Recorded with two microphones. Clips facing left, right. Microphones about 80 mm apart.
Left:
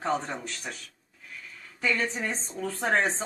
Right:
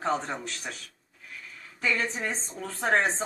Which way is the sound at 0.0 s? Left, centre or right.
Centre.